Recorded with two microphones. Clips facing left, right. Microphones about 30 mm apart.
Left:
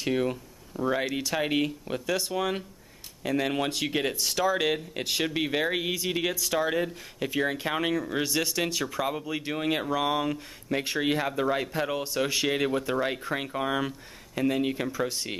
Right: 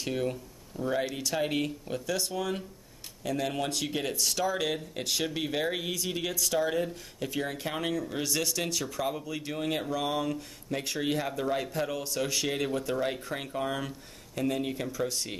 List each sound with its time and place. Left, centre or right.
0.0 s speech: centre
0.7 s speech: centre
2.3 s speech: left